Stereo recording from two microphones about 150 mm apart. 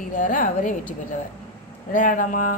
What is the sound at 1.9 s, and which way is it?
Speech, 60° left (ahead or behind).